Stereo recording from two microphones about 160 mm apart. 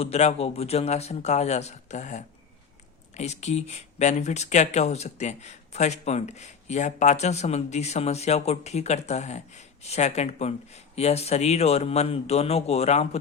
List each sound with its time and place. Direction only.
0.0 s speech: 40° left (ahead or behind)